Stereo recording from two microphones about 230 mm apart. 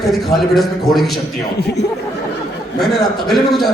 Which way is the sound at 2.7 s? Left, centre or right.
Centre.